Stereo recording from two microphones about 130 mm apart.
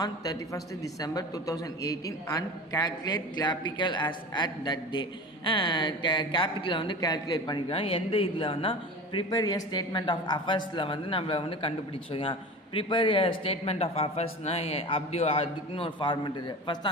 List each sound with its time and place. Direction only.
0.0 s a man's voice: 30° left (ahead or behind)
7.7 s a man's voice: 45° left (ahead or behind)
9.1 s a man's voice: 30° left (ahead or behind)